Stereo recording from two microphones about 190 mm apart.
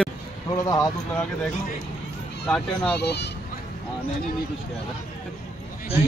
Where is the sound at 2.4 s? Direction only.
5° left (ahead or behind).